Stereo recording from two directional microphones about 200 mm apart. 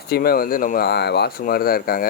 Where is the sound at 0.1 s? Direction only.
50° left (ahead or behind).